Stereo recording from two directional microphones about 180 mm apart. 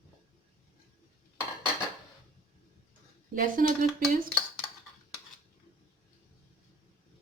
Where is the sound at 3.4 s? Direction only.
50° right (ahead or behind).